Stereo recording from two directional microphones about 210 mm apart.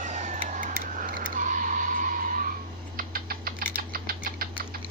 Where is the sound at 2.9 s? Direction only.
45° right (ahead or behind).